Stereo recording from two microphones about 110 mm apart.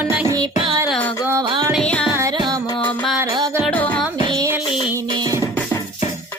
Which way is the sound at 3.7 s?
10° left (ahead or behind).